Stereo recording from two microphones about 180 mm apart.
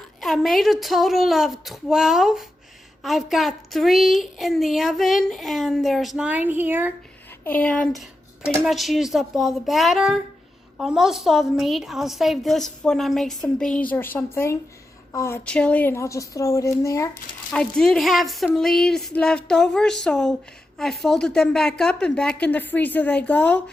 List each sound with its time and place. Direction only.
0.2 s a woman's voice: centre (ahead or behind)
7.4 s a woman's voice: 10° left (ahead or behind)
17.5 s a woman's voice: 5° left (ahead or behind)